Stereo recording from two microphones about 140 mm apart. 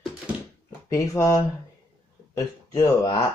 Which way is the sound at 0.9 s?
20° left (ahead or behind).